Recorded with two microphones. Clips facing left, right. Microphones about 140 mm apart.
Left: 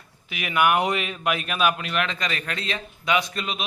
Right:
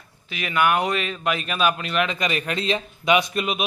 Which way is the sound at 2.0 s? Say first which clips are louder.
Right 4 dB; 10° right (ahead or behind).